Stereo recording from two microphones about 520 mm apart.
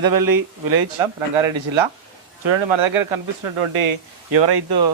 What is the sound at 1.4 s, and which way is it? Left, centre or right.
Speech, right.